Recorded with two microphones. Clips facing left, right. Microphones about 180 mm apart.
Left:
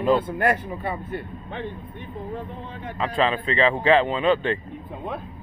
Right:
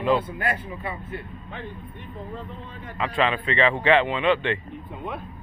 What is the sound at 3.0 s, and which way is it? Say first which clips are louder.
Speech: left 1 dB; 35° left (ahead or behind).